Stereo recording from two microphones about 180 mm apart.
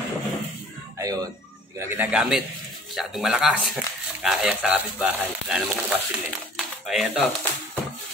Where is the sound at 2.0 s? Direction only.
5° right (ahead or behind).